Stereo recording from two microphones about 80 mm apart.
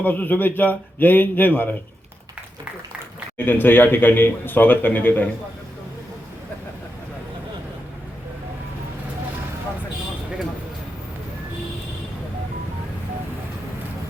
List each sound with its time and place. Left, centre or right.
0.0 s speech: left
3.3 s speech: left